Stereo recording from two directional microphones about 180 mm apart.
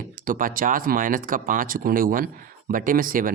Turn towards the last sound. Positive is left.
turn(degrees=-50)  # may be behind; listen again after turning